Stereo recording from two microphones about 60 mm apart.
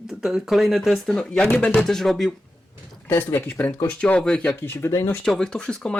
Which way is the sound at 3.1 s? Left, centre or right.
Left.